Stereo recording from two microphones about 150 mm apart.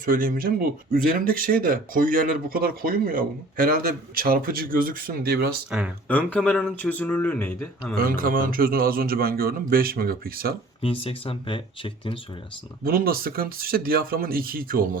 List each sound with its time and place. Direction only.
0.0 s speech: 70° right (ahead or behind); by 5.5 s 90° right
6.1 s speech: 10° left (ahead or behind)
7.9 s speech: 70° right (ahead or behind); by 10.5 s 85° right
10.8 s speech: 40° left (ahead or behind)
12.8 s speech: 75° right (ahead or behind)